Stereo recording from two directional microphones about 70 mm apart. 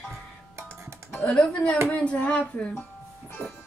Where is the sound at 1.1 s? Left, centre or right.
Centre.